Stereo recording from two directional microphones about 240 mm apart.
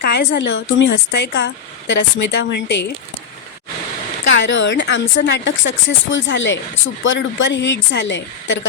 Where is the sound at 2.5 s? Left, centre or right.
Left.